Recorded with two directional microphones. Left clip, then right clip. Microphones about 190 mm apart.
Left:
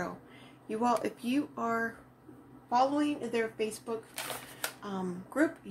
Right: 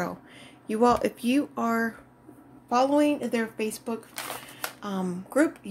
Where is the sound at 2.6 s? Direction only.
55° right (ahead or behind).